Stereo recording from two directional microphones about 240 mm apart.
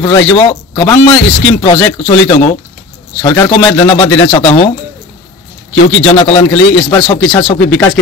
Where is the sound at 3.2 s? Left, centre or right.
Centre.